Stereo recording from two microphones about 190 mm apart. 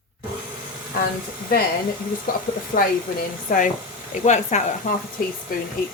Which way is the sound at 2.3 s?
45° left (ahead or behind).